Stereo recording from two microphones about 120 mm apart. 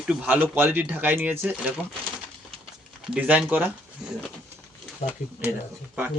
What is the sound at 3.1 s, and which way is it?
Speech, 10° right (ahead or behind).